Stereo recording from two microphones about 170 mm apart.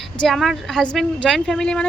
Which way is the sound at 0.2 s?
Centre (ahead or behind).